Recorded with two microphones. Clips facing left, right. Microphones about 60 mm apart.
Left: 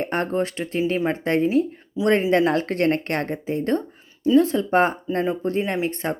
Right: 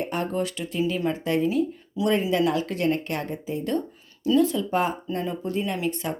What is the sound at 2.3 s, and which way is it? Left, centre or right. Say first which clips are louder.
Speech: left 4 dB; left.